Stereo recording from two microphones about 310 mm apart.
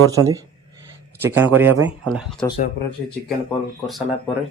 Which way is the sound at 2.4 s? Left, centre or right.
Centre.